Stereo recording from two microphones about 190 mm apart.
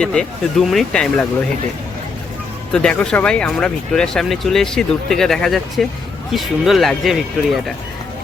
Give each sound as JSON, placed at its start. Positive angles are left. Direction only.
{"t": 0.0, "sound": "speech", "side_deg": 5}
{"t": 2.7, "sound": "speech", "side_deg": 5}